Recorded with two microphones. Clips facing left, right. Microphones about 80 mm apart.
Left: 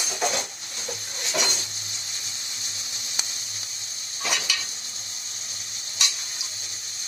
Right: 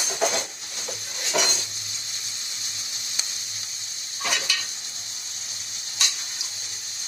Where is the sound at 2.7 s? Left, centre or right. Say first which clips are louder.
Left 2 dB; left.